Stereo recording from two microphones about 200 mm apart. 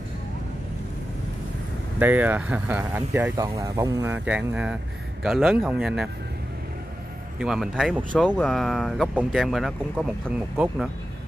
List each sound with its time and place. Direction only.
2.0 s speech: 10° right (ahead or behind)
7.3 s speech: 5° right (ahead or behind)